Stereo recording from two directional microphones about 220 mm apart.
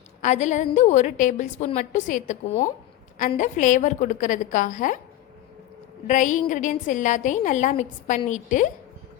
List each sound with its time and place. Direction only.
0.2 s a woman's voice: 35° left (ahead or behind)
6.1 s a woman's voice: 35° left (ahead or behind)